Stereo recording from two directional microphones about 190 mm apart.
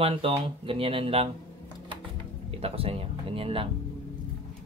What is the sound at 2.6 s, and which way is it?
Speech, 30° right (ahead or behind).